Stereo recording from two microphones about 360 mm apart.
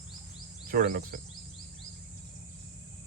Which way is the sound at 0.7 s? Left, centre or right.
Right.